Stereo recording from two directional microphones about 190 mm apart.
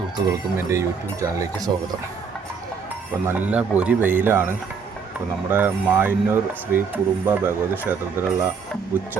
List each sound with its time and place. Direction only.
0.3 s speech: 15° right (ahead or behind)
3.2 s speech: 10° right (ahead or behind)
5.5 s speech: 10° right (ahead or behind)